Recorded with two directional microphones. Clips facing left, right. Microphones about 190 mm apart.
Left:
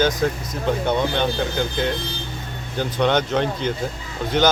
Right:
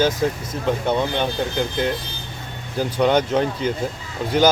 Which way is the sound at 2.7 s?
5° right (ahead or behind).